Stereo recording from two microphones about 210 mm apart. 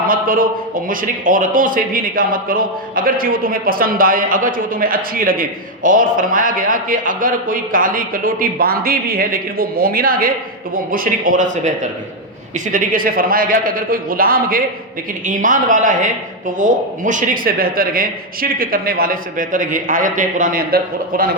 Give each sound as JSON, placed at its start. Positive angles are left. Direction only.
{"t": 0.1, "sound": "a man's voice", "side_deg": -45}